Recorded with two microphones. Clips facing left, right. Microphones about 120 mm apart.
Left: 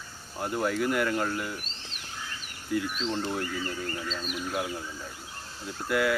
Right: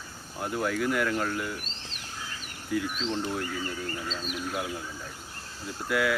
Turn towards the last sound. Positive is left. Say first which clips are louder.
# left 1 dB
turn(degrees=0)  # may be behind; listen again after turning